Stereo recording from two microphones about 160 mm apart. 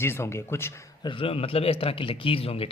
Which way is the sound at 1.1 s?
35° left (ahead or behind).